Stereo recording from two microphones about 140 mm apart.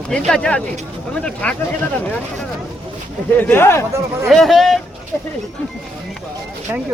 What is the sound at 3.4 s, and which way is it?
Speech, 15° left (ahead or behind).